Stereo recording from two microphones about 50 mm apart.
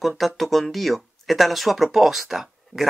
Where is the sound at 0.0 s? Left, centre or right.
Centre.